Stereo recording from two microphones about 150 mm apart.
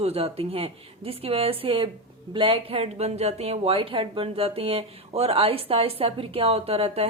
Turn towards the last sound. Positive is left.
turn(degrees=-40)  # may be behind; listen again after turning